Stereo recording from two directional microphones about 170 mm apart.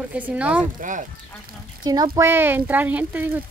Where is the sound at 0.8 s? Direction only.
50° right (ahead or behind).